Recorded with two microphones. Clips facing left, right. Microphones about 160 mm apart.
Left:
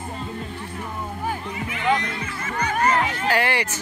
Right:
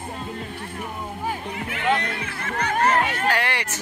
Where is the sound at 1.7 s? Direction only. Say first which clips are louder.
Left 1 dB; 60° right (ahead or behind).